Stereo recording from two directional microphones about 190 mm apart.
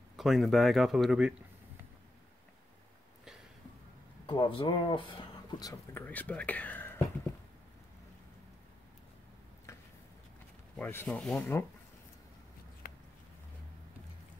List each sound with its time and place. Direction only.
0.2 s speech: centre (ahead or behind)
4.3 s speech: 25° left (ahead or behind)
6.0 s speech: 10° left (ahead or behind)
9.7 s a sound: 15° left (ahead or behind)
10.8 s speech: 10° left (ahead or behind)
12.8 s a sound: 50° left (ahead or behind)